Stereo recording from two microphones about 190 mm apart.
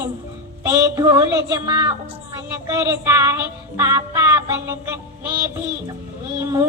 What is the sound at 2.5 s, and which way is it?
Music, 15° right (ahead or behind).